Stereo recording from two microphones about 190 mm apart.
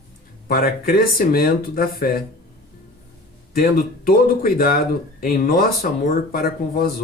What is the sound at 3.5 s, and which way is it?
Speech, 50° left (ahead or behind).